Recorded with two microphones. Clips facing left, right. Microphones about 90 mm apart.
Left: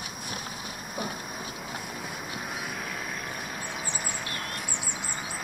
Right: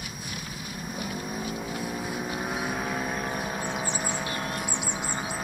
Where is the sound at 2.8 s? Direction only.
40° right (ahead or behind).